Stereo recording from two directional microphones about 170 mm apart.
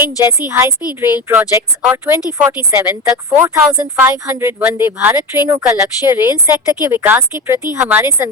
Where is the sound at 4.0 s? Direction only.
10° right (ahead or behind).